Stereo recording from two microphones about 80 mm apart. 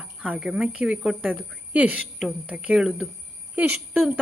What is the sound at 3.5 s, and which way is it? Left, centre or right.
Speech, centre.